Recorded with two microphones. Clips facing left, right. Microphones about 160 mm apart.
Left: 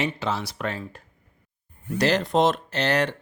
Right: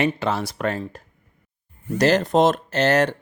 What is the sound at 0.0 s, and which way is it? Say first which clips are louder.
Speech: right 5 dB; 55° right (ahead or behind).